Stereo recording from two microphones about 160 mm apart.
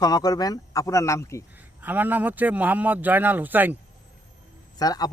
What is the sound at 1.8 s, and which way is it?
Speech, 10° right (ahead or behind).